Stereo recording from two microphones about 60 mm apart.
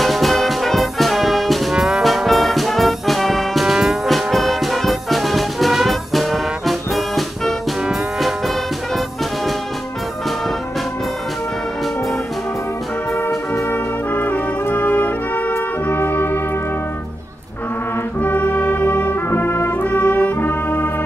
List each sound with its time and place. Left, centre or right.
0.0 s music: centre
1.8 s music: centre
2.0 s music: centre
13.7 s brass instrument: left
18.2 s brass instrument: left